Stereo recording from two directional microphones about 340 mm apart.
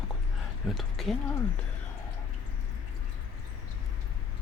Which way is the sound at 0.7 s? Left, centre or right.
Centre.